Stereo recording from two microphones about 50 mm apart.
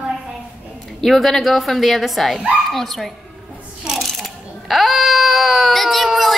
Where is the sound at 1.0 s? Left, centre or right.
Centre.